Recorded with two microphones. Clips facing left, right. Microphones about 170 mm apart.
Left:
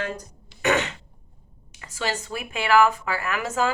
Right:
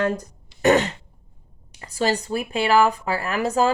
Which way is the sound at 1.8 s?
35° right (ahead or behind).